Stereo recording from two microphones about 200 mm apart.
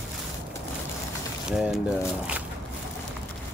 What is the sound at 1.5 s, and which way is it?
Speech, 5° right (ahead or behind).